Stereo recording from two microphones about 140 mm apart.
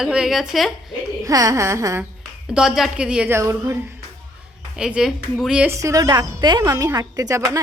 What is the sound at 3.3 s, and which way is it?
Speech, 20° right (ahead or behind).